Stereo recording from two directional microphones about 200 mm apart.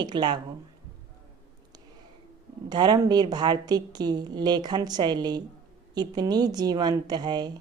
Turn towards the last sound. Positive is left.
turn(degrees=-20)  # may be behind; listen again after turning